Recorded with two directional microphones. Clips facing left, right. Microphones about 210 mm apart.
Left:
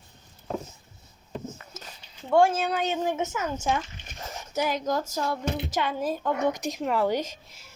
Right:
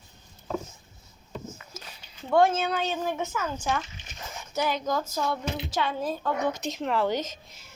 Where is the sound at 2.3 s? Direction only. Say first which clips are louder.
Left 1 dB; 10° left (ahead or behind).